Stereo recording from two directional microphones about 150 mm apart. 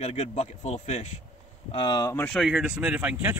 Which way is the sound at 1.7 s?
35° left (ahead or behind).